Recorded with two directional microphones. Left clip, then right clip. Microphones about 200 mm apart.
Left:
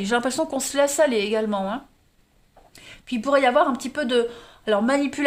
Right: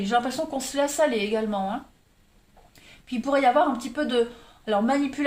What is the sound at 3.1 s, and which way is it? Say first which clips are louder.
Speech: left 2 dB; 50° left (ahead or behind).